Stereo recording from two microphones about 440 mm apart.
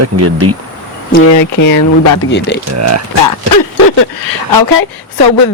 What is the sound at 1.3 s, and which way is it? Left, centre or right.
Speech, left.